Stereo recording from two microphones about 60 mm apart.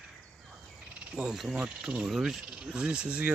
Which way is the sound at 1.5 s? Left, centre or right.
Centre.